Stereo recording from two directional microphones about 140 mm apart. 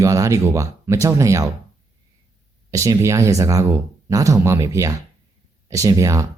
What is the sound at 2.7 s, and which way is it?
Speech, 20° right (ahead or behind).